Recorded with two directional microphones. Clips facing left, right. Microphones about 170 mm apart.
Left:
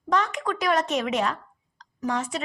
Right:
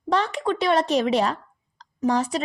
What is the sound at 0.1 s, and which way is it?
A woman's voice, 30° right (ahead or behind).